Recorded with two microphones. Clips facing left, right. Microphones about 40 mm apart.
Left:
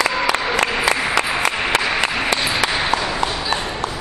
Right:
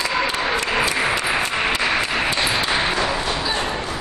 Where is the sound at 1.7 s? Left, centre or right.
Left.